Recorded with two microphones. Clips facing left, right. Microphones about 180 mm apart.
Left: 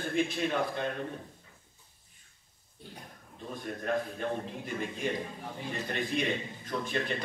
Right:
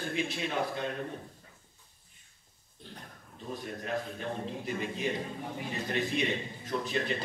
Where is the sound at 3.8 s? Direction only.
50° left (ahead or behind).